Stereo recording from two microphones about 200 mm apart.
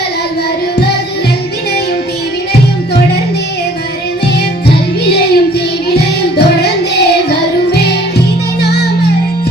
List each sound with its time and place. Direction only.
4.7 s music: 55° left (ahead or behind)